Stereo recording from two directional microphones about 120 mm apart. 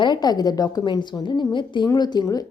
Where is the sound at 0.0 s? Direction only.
35° left (ahead or behind).